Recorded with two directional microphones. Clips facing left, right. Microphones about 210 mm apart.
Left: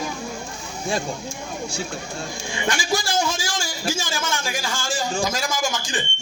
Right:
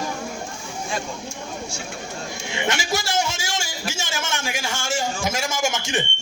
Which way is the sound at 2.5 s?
20° right (ahead or behind).